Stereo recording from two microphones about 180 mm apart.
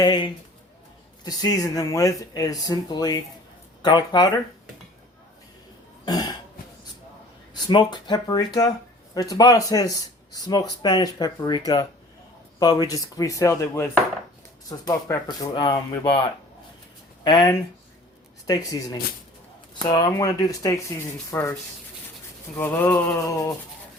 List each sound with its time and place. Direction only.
0.0 s speech: 25° left (ahead or behind)
6.1 s speech: 20° left (ahead or behind)
7.5 s speech: 25° left (ahead or behind)
17.2 s speech: 20° left (ahead or behind)
21.2 s a sound: 15° left (ahead or behind)
22.5 s a sound: 10° left (ahead or behind)